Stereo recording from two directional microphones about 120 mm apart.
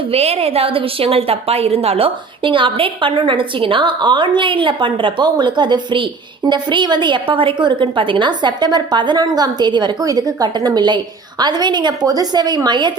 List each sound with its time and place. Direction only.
0.1 s a woman's voice: 60° right (ahead or behind); by 12.9 s 40° right (ahead or behind)